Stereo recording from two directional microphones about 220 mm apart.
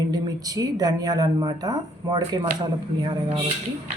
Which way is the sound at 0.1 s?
15° right (ahead or behind).